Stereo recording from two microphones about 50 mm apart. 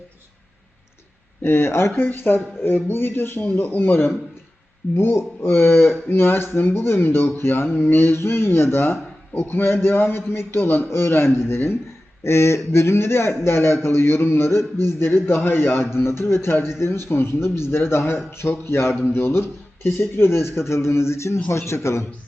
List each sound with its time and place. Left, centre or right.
1.5 s a man's voice: left